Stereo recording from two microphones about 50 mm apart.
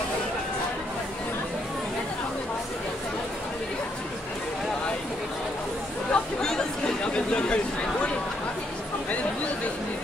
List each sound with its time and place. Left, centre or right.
6.1 s chatter: centre
7.1 s speech: left